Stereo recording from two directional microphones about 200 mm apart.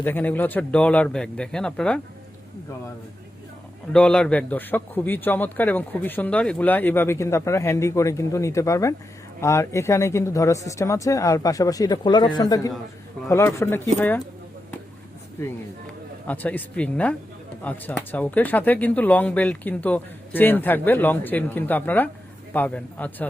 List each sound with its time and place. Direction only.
0.0 s speech: 10° left (ahead or behind)
3.9 s a man's voice: 5° left (ahead or behind)
15.4 s a man's voice: 15° left (ahead or behind)